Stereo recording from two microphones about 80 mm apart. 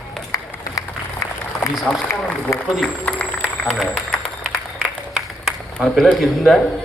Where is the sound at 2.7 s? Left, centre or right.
Centre.